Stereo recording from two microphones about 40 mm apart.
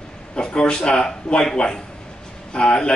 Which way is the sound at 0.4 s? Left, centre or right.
Left.